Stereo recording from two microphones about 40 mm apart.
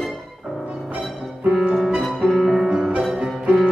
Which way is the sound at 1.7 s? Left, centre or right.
Centre.